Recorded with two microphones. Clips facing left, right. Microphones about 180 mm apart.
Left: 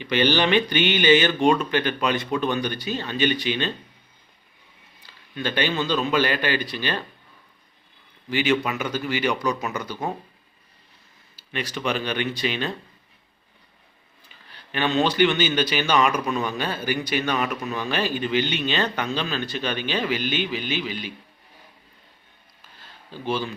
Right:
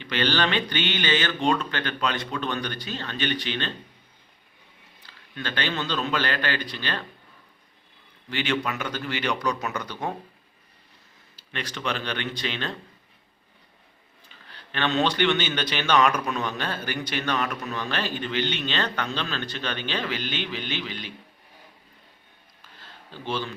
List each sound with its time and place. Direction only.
0.0 s a man's voice: 15° left (ahead or behind)
5.0 s a man's voice: 10° left (ahead or behind)
8.3 s a man's voice: 10° left (ahead or behind)
11.3 s a man's voice: 10° left (ahead or behind)
14.7 s a man's voice: 5° left (ahead or behind)
23.1 s a man's voice: 10° left (ahead or behind)